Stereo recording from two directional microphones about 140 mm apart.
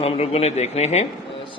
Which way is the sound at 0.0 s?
45° left (ahead or behind).